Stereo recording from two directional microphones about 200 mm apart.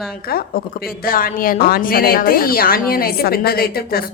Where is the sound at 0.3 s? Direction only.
50° left (ahead or behind).